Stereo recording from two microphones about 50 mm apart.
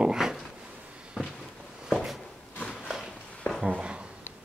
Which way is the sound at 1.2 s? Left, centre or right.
Centre.